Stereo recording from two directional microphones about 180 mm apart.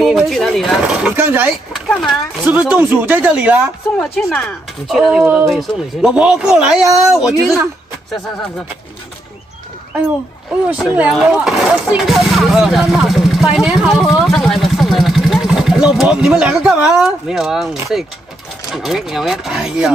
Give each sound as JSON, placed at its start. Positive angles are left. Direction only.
{"t": 0.0, "sound": "speech", "side_deg": 0}
{"t": 4.0, "sound": "speech", "side_deg": 5}
{"t": 10.7, "sound": "speech", "side_deg": -5}